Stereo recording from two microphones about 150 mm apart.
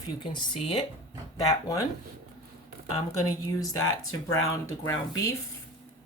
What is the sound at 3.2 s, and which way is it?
Speech, 25° left (ahead or behind).